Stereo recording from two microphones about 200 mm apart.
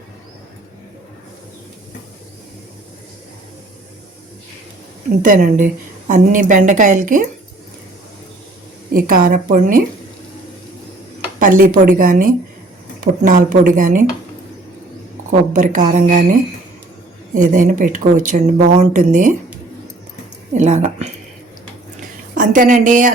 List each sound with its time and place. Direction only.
5.2 s a woman's voice: 40° right (ahead or behind)
8.9 s a woman's voice: 45° right (ahead or behind)
11.3 s a woman's voice: 40° right (ahead or behind)
15.3 s a woman's voice: 40° right (ahead or behind)
17.3 s a woman's voice: 40° right (ahead or behind)
20.5 s a woman's voice: 35° right (ahead or behind)